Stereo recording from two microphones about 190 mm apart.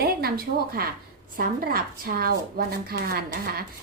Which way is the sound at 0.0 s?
55° right (ahead or behind).